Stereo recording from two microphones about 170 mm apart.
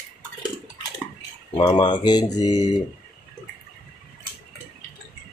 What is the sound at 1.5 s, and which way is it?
Speech, 25° left (ahead or behind).